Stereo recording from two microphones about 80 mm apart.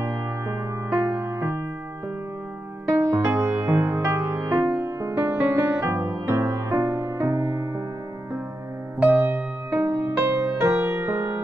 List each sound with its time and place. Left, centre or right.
0.0 s music: right
0.8 s music: right
1.1 s music: right
2.9 s music: right
3.3 s music: right
9.0 s music: right